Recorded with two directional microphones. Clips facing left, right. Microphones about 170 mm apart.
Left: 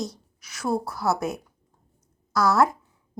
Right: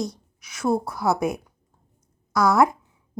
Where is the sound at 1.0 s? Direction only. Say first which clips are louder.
Right 4 dB; 15° right (ahead or behind).